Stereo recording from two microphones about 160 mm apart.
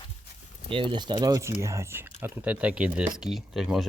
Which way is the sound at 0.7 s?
35° right (ahead or behind).